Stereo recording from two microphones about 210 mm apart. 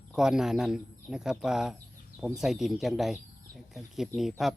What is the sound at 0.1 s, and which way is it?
Speech, 5° right (ahead or behind).